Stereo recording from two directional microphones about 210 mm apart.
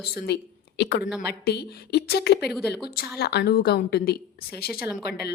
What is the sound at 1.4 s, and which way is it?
A woman's voice, 50° left (ahead or behind).